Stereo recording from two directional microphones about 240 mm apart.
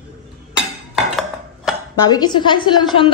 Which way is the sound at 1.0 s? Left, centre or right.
Centre.